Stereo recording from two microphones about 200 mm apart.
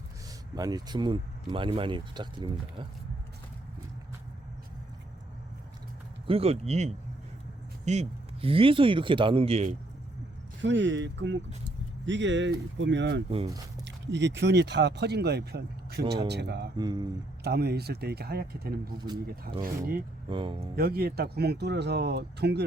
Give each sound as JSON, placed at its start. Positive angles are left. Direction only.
{"t": 0.5, "sound": "speech", "side_deg": -20}
{"t": 6.2, "sound": "speech", "side_deg": -30}
{"t": 10.6, "sound": "speech", "side_deg": -65}
{"t": 16.7, "sound": "speech", "side_deg": -20}
{"t": 17.4, "sound": "speech", "side_deg": -55}
{"t": 19.0, "sound": "speech", "side_deg": -20}
{"t": 20.7, "sound": "speech", "side_deg": -50}